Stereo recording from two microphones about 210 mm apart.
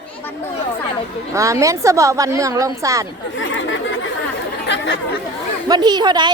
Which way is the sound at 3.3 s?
65° left (ahead or behind).